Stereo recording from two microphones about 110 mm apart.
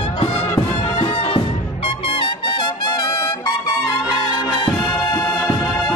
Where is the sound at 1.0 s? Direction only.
55° left (ahead or behind).